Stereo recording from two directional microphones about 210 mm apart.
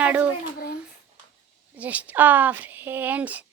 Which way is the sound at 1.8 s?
5° right (ahead or behind).